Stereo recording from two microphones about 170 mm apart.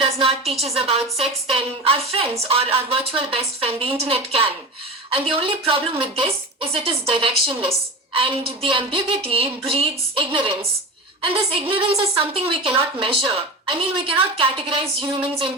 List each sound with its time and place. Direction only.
0.0 s a woman's voice: 35° right (ahead or behind)